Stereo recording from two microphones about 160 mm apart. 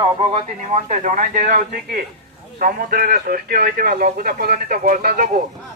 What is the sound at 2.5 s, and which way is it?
Speech, 60° right (ahead or behind).